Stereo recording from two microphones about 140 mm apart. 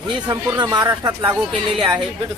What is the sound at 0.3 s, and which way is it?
Speech, 30° right (ahead or behind).